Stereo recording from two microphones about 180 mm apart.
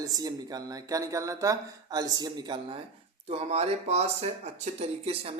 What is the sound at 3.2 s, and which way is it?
Speech, 35° right (ahead or behind).